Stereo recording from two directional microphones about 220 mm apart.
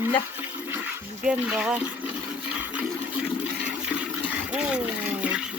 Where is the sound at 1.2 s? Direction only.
5° right (ahead or behind).